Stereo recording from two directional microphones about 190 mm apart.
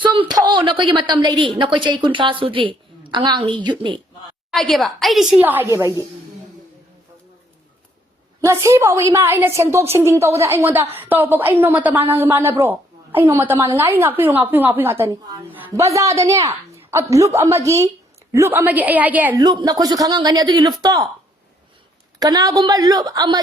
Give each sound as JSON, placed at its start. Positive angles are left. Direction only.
{"t": 0.0, "sound": "a woman's voice", "side_deg": -25}
{"t": 4.5, "sound": "a woman's voice", "side_deg": 0}
{"t": 8.4, "sound": "a woman's voice", "side_deg": -15}
{"t": 19.4, "sound": "a woman's voice", "side_deg": -20}
{"t": 22.2, "sound": "a woman's voice", "side_deg": -20}